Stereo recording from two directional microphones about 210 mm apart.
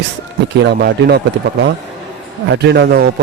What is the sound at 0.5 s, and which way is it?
Speech, 55° right (ahead or behind).